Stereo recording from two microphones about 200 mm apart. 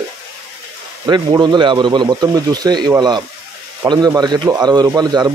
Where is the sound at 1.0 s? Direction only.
20° right (ahead or behind).